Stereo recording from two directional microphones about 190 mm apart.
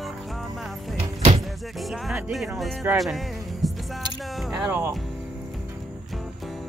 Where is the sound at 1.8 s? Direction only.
Centre (ahead or behind).